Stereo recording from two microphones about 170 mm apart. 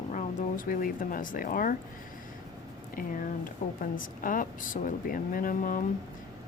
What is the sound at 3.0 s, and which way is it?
A woman's voice, 55° left (ahead or behind).